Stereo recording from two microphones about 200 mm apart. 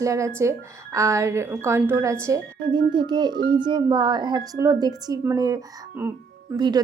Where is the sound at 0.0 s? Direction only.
15° right (ahead or behind).